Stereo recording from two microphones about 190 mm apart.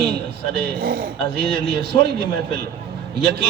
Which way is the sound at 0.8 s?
50° right (ahead or behind).